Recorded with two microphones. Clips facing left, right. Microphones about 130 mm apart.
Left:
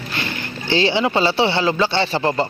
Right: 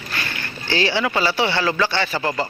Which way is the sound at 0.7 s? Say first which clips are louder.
Left 3 dB; 20° left (ahead or behind).